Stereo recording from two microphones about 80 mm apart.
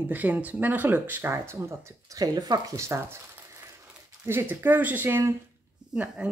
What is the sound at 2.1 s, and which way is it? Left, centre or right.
Speech, right.